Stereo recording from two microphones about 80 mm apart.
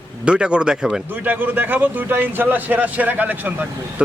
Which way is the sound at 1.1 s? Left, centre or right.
Right.